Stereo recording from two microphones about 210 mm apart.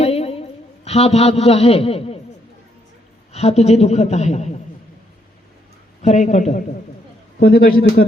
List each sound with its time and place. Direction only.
0.0 s a sound: 30° left (ahead or behind)
3.3 s a man's voice: 30° left (ahead or behind)
6.0 s a man's voice: 35° left (ahead or behind)